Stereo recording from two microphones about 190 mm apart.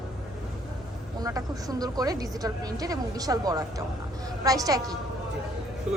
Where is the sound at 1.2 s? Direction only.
20° right (ahead or behind).